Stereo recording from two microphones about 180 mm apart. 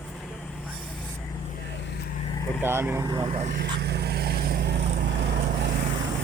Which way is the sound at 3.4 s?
75° right (ahead or behind).